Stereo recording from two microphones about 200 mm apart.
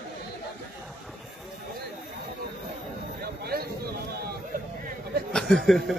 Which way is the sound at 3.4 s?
50° right (ahead or behind).